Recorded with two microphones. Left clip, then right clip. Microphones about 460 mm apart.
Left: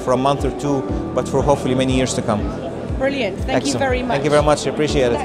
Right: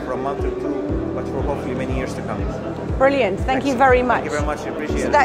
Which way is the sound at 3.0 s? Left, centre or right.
Right.